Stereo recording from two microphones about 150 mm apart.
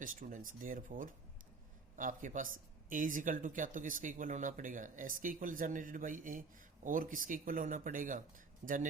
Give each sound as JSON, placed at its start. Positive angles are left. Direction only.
{"t": 0.0, "sound": "speech", "side_deg": -60}